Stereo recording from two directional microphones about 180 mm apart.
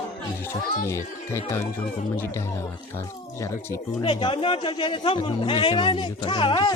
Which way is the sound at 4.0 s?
30° left (ahead or behind).